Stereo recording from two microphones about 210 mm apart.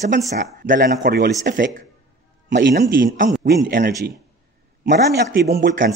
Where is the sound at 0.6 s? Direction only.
45° right (ahead or behind).